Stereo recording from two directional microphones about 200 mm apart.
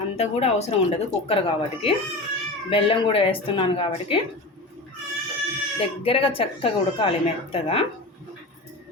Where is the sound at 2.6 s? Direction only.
25° left (ahead or behind).